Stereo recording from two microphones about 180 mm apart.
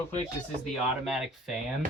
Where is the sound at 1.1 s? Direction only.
Centre (ahead or behind).